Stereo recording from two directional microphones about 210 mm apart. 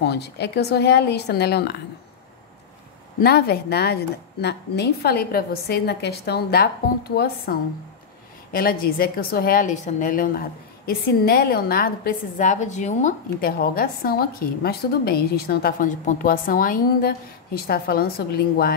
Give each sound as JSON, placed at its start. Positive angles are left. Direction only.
{"t": 0.0, "sound": "a woman's voice", "side_deg": 50}
{"t": 3.2, "sound": "a woman's voice", "side_deg": 50}